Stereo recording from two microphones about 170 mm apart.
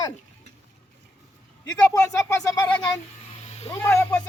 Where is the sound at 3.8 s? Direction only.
15° left (ahead or behind).